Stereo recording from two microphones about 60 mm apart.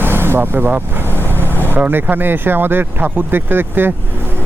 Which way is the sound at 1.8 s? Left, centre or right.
Right.